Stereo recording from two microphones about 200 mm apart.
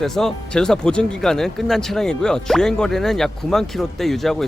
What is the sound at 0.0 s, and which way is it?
Speech, centre (ahead or behind).